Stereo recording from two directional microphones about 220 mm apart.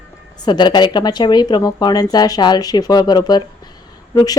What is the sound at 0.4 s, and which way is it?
A woman's voice, 20° left (ahead or behind).